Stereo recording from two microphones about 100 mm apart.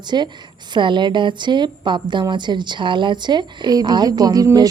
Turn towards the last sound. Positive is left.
turn(degrees=-40)  # may be behind; listen again after turning